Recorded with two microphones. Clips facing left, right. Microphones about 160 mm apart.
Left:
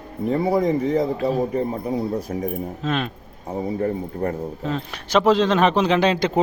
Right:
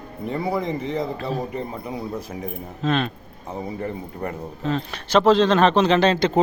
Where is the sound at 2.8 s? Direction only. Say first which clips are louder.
Right 3 dB; 10° left (ahead or behind).